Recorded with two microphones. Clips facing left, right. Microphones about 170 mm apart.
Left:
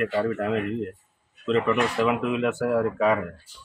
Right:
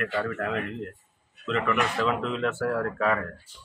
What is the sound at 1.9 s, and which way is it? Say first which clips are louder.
Speech: left 4 dB; 15° left (ahead or behind).